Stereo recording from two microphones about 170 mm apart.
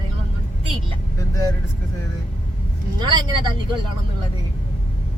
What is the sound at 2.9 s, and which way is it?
Vehicle, 25° right (ahead or behind).